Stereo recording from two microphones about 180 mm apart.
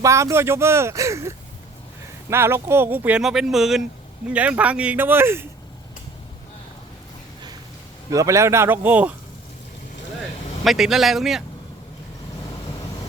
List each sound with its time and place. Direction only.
0.0 s speech: 15° right (ahead or behind)
2.3 s speech: 15° right (ahead or behind)
8.1 s speech: 15° right (ahead or behind)
10.6 s speech: centre (ahead or behind)